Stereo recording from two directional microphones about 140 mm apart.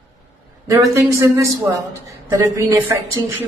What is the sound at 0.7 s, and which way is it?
A man's voice, 20° right (ahead or behind).